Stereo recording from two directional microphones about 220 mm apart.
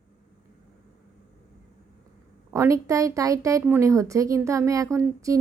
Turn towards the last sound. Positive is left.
turn(degrees=-15)  # may be behind; listen again after turning